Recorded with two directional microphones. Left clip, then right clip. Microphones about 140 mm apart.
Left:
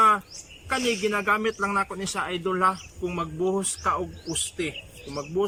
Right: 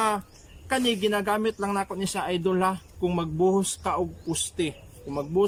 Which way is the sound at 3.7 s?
35° right (ahead or behind).